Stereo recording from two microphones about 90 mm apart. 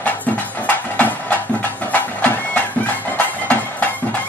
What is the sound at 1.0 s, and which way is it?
Music, 20° left (ahead or behind).